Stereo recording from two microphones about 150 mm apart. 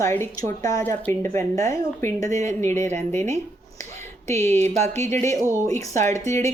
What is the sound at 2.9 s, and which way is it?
Speech, 50° right (ahead or behind).